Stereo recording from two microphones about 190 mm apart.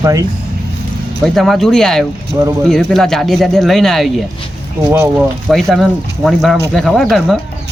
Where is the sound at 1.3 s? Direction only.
Centre (ahead or behind).